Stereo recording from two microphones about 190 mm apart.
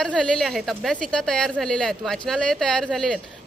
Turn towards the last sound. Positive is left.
turn(degrees=5)  # may be behind; listen again after turning